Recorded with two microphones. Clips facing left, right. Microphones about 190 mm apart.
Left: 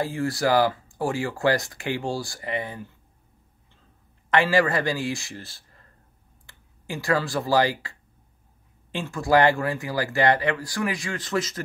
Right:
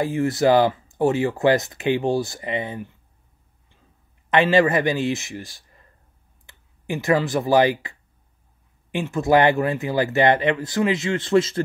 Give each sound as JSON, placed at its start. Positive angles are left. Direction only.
{"t": 0.0, "sound": "speech", "side_deg": -20}
{"t": 4.3, "sound": "speech", "side_deg": -20}